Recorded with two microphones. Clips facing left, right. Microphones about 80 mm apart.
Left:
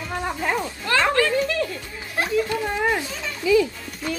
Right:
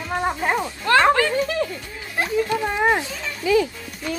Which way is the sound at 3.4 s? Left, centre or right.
Right.